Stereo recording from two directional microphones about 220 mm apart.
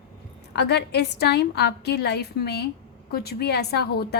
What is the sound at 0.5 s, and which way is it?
A woman's voice, 50° left (ahead or behind).